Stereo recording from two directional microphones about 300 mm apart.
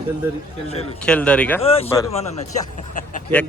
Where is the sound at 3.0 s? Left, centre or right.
Left.